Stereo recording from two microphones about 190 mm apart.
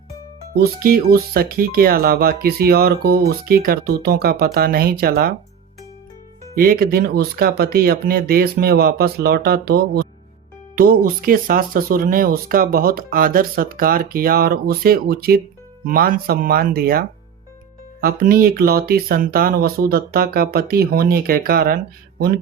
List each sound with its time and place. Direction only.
0.6 s speech: 50° right (ahead or behind)
6.6 s speech: 50° right (ahead or behind)